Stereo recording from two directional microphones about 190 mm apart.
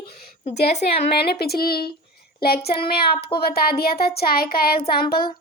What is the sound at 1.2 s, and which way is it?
Speech, 55° left (ahead or behind).